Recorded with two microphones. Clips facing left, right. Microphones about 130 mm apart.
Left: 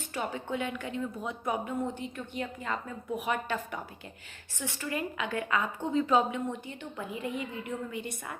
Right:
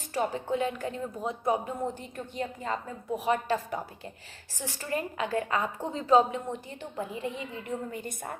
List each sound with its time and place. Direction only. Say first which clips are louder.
0.1 s a woman's voice: right 5 dB; 35° right (ahead or behind)